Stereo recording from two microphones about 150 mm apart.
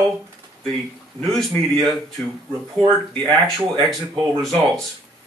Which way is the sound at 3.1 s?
30° right (ahead or behind).